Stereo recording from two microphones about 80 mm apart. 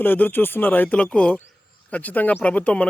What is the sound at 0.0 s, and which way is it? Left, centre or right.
Speech, left.